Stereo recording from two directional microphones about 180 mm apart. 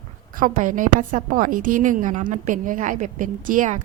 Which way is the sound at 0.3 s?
45° right (ahead or behind).